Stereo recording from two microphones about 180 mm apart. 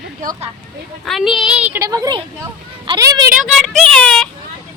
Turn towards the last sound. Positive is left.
turn(degrees=5)  # may be behind; listen again after turning